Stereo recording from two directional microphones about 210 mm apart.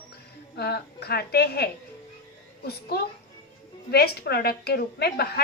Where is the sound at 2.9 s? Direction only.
50° left (ahead or behind).